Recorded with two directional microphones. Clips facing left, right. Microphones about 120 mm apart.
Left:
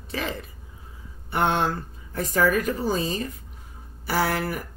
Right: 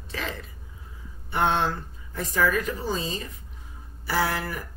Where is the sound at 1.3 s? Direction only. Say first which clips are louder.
Left 1 dB; 50° left (ahead or behind).